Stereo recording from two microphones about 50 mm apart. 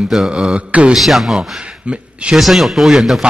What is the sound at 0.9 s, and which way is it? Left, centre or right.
Speech, centre.